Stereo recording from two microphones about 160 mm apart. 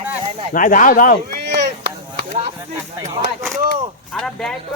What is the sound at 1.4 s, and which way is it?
Chop, 90° right.